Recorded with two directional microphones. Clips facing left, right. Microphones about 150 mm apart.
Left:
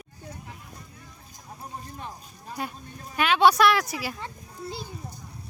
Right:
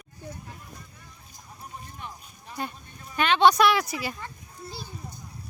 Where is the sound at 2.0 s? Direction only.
35° left (ahead or behind).